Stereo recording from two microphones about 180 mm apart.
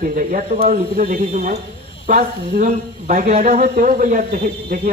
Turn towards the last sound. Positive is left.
turn(degrees=-50)  # may be behind; listen again after turning